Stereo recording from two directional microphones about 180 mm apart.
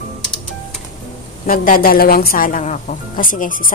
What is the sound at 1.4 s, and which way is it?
A woman's voice, 55° left (ahead or behind).